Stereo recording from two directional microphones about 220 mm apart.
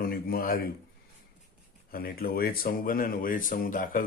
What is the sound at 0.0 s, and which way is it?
Speech, 40° left (ahead or behind).